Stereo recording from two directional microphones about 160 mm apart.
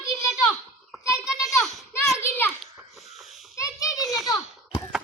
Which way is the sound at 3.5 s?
20° left (ahead or behind).